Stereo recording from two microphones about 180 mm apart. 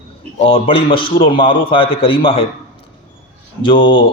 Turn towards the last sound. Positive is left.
turn(degrees=30)  # may be behind; listen again after turning